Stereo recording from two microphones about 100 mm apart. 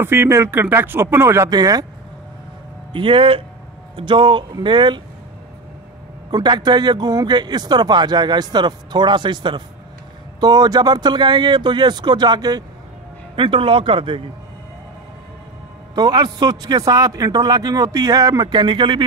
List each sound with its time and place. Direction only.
0.0 s speech: 25° right (ahead or behind)
1.5 s speech: 40° right (ahead or behind)
2.9 s speech: 60° right (ahead or behind)
6.3 s speech: 45° right (ahead or behind)
13.4 s speech: 65° right (ahead or behind)
15.9 s speech: 45° right (ahead or behind)